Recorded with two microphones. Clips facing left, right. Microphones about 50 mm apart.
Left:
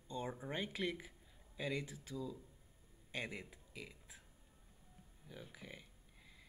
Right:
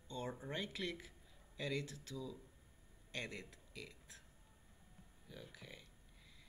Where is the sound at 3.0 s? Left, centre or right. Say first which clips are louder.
Left 2 dB; centre.